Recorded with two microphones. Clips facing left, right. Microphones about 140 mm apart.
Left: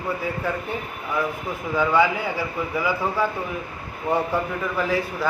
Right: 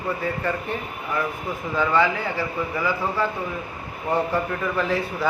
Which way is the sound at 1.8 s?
10° left (ahead or behind).